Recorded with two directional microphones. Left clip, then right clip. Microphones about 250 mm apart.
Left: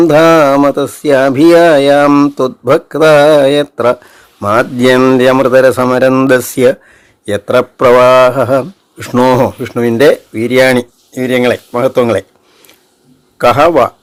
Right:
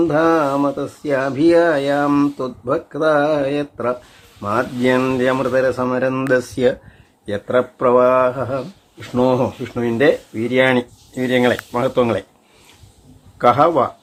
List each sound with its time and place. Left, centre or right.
0.0 s speech: left
13.4 s speech: left